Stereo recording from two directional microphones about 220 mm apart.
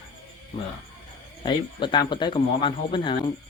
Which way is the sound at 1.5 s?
20° left (ahead or behind).